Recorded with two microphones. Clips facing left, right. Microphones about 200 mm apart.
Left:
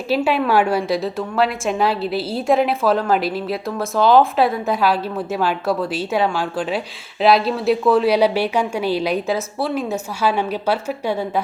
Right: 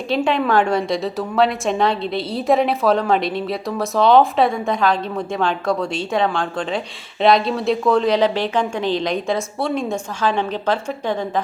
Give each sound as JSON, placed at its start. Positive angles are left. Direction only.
{"t": 0.1, "sound": "a woman's voice", "side_deg": 5}